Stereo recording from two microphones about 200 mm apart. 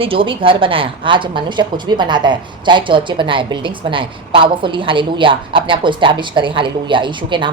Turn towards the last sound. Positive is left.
turn(degrees=-25)  # may be behind; listen again after turning